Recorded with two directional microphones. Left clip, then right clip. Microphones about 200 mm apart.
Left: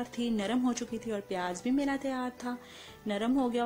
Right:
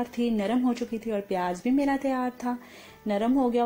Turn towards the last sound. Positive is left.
turn(degrees=15)  # may be behind; listen again after turning